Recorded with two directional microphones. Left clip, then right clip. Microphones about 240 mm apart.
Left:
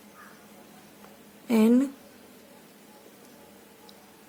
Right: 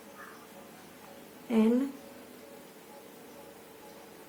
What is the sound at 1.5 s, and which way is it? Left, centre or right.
Speech, left.